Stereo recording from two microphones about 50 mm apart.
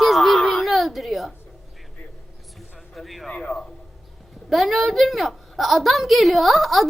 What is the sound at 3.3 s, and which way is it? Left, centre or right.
Speech, left.